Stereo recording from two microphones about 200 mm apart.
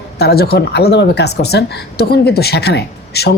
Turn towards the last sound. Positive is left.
turn(degrees=55)  # may be behind; listen again after turning